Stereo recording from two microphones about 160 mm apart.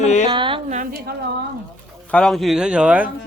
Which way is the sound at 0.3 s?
30° right (ahead or behind).